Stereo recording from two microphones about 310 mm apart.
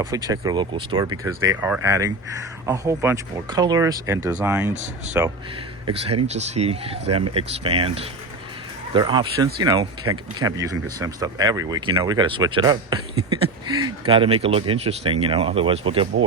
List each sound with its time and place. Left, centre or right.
0.0 s speech: centre
4.7 s speech: right
6.2 s speech: right